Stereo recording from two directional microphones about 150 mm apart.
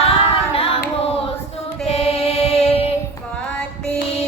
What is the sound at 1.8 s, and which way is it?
Music, 40° left (ahead or behind).